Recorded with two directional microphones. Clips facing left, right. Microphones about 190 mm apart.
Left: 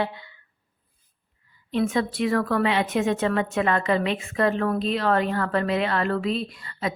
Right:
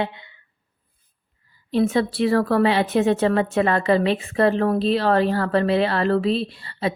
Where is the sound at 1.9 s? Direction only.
35° right (ahead or behind).